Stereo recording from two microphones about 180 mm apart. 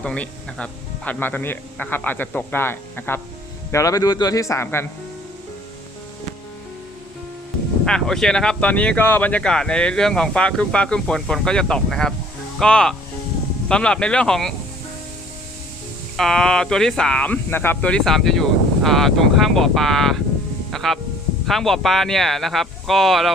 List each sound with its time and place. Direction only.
0.0 s speech: 5° left (ahead or behind)
7.9 s speech: 5° left (ahead or behind)
16.1 s speech: centre (ahead or behind)
20.7 s music: centre (ahead or behind)
21.4 s speech: centre (ahead or behind)